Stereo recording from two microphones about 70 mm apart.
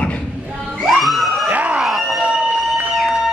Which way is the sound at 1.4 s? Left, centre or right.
Right.